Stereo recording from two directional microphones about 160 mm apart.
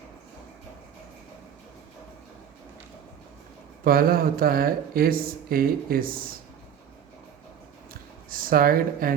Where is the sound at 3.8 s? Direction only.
65° right (ahead or behind).